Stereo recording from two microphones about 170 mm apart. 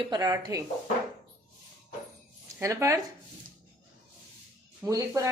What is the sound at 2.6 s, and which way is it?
Speech, 20° right (ahead or behind).